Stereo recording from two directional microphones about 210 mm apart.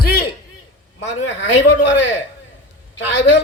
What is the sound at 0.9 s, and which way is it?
Speech, 60° left (ahead or behind).